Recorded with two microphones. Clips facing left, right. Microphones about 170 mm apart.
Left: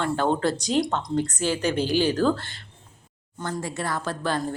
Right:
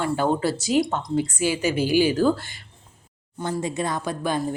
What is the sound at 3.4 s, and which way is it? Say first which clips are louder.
A woman's voice: right 4 dB; 15° right (ahead or behind).